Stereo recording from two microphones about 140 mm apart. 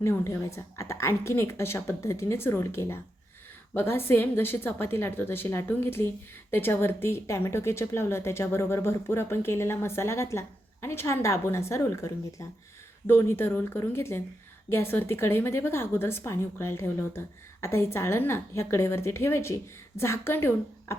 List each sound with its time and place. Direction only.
0.0 s a woman's voice: 20° left (ahead or behind)